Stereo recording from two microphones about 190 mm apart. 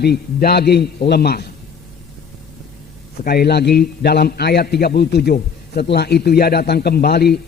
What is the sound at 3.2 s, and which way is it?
A man's voice, 55° left (ahead or behind).